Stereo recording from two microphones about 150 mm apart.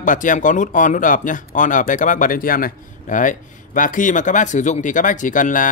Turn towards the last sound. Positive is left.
turn(degrees=60)  # may be behind; listen again after turning